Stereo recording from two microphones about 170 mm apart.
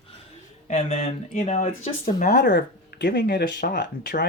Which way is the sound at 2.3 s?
70° left (ahead or behind).